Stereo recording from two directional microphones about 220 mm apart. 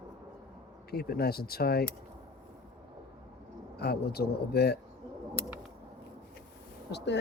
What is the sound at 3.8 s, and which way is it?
Speech, 45° left (ahead or behind).